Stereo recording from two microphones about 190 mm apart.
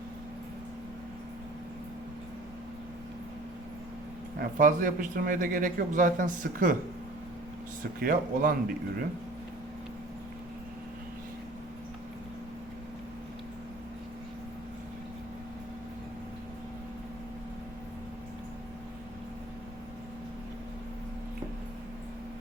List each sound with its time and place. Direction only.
4.4 s a man's voice: 45° right (ahead or behind)
8.0 s a man's voice: 50° right (ahead or behind)